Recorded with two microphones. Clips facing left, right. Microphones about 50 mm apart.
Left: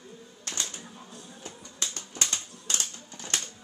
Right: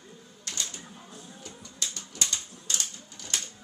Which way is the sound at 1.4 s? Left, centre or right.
Left.